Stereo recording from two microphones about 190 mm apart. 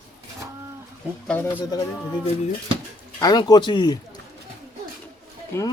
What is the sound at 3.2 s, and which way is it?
Speech, 20° left (ahead or behind).